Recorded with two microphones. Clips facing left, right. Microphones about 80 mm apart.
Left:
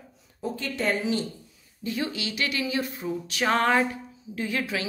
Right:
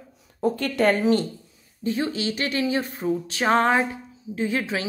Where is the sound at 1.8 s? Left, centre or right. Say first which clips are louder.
Right 5 dB; right.